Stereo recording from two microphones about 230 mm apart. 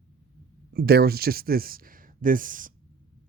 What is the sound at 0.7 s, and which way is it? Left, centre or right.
Speech, right.